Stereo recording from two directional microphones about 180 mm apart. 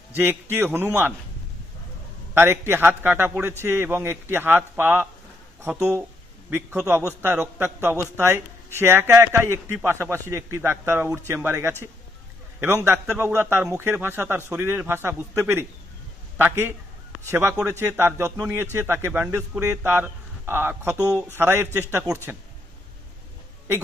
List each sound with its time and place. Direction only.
0.1 s a man's voice: 10° right (ahead or behind)
2.3 s a man's voice: 15° right (ahead or behind)
21.0 s speech: 10° left (ahead or behind)
21.4 s a man's voice: 10° right (ahead or behind)